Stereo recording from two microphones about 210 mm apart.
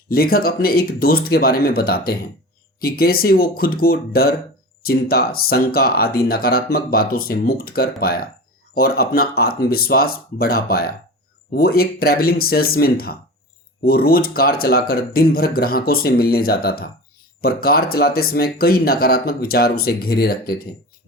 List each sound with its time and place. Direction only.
0.1 s speech: 45° left (ahead or behind)